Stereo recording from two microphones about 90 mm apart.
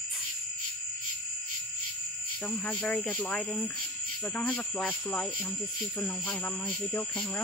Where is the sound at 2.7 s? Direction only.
15° left (ahead or behind).